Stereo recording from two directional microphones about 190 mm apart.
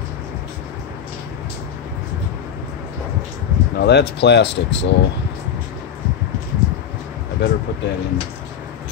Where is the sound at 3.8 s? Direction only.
60° left (ahead or behind).